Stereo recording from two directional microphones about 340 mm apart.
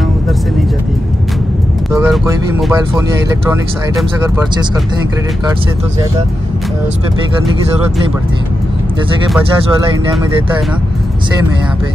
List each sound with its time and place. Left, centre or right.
1.9 s vehicle: centre
3.4 s speech: centre